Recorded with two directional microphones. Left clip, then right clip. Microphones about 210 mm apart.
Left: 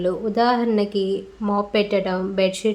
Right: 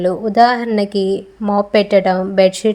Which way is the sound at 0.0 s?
30° right (ahead or behind).